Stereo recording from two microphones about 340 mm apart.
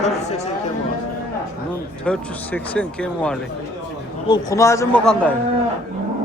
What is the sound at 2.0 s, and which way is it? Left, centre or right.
A man's voice, centre.